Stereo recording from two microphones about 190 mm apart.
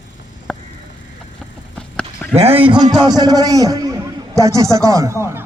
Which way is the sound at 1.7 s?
5° left (ahead or behind).